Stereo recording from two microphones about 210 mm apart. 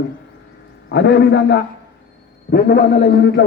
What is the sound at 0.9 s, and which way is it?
A man's voice, 55° left (ahead or behind).